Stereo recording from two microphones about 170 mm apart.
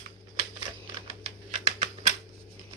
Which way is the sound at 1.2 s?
35° right (ahead or behind).